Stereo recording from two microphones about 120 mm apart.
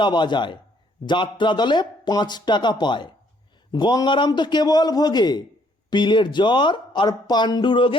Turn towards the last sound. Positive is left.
turn(degrees=40)  # may be behind; listen again after turning